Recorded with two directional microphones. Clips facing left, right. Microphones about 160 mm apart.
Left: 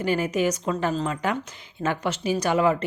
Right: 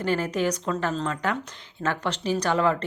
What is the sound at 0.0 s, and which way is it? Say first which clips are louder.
A woman's voice: left 2 dB; 10° left (ahead or behind).